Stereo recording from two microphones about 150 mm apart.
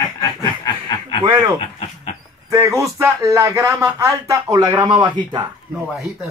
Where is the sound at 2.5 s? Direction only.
20° right (ahead or behind).